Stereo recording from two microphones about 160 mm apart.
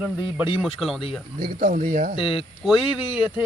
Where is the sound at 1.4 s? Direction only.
65° right (ahead or behind).